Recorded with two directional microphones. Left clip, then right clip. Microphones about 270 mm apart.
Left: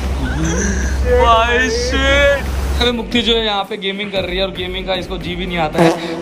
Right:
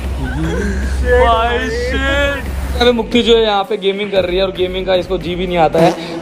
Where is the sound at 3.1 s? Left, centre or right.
Centre.